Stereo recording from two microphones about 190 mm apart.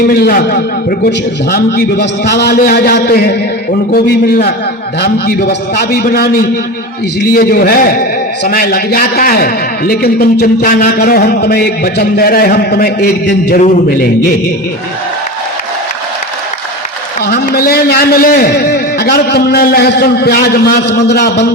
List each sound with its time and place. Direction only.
0.1 s a man's voice: 55° left (ahead or behind)
17.2 s a man's voice: 55° left (ahead or behind)